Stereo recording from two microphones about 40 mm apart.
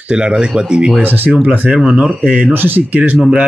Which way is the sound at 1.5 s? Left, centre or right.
Right.